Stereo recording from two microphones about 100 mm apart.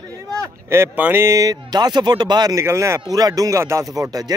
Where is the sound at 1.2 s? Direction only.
35° right (ahead or behind).